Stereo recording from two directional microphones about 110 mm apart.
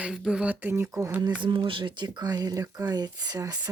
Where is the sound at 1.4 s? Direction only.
50° right (ahead or behind).